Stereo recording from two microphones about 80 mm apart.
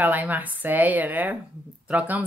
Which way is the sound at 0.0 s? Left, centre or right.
Right.